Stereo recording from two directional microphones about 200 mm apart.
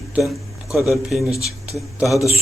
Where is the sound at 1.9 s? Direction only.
Centre (ahead or behind).